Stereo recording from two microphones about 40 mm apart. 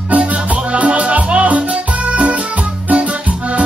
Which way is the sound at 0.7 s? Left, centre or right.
Right.